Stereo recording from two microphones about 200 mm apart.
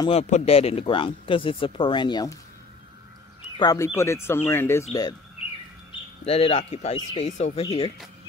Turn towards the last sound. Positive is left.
turn(degrees=25)  # may be behind; listen again after turning